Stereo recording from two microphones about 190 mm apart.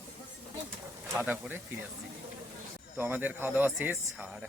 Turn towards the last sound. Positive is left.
turn(degrees=-10)  # may be behind; listen again after turning